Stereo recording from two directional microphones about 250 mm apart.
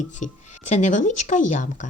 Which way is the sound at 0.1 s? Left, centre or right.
Left.